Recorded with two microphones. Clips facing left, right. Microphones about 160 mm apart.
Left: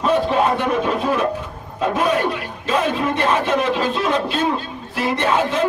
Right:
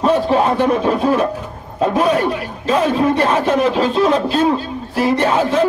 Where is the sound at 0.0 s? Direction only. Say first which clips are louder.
Right 3 dB; 35° right (ahead or behind).